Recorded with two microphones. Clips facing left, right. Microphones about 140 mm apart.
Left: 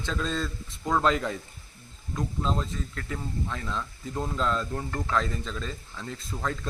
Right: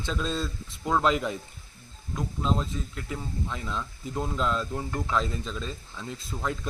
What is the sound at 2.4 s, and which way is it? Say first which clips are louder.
Speech: right 2 dB; 10° right (ahead or behind).